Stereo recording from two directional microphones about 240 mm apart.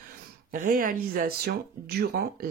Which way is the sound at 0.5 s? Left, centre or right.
Right.